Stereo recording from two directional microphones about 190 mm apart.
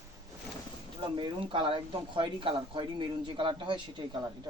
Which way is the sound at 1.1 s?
25° right (ahead or behind).